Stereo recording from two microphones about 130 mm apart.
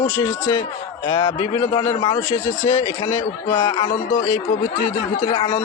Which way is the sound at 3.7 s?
40° left (ahead or behind).